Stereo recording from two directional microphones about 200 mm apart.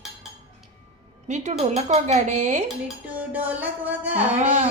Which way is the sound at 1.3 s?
35° right (ahead or behind).